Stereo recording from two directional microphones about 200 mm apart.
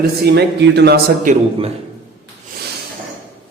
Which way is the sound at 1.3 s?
40° right (ahead or behind).